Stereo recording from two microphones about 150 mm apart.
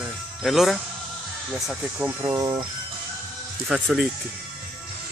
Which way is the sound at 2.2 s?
25° right (ahead or behind).